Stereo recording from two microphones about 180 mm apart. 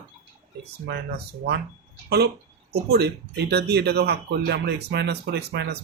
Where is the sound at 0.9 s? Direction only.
65° right (ahead or behind).